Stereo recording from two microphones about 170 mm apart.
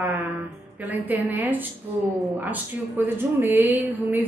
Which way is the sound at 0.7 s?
10° right (ahead or behind).